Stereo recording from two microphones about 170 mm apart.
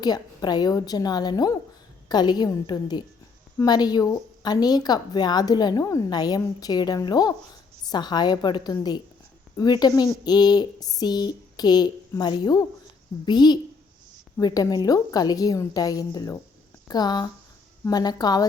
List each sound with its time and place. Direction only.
0.0 s speech: 25° left (ahead or behind)